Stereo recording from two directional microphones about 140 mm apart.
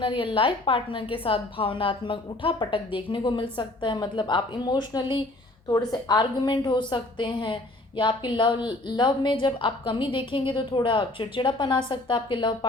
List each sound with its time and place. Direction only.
0.0 s a woman's voice: 40° left (ahead or behind)